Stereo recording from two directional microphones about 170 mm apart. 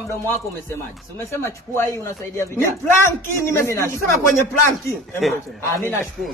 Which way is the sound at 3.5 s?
15° left (ahead or behind).